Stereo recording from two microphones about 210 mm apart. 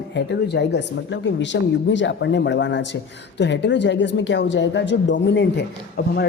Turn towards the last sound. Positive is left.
turn(degrees=50)  # may be behind; listen again after turning